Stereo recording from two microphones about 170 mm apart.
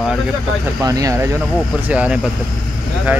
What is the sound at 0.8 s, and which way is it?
Speech, 20° right (ahead or behind).